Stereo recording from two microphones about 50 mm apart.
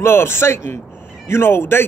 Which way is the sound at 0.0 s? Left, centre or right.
Left.